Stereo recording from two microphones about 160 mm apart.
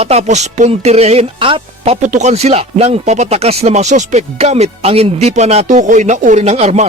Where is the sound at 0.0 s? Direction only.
45° right (ahead or behind).